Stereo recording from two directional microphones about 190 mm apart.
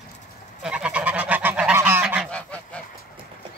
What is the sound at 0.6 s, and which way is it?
Goose, 5° right (ahead or behind).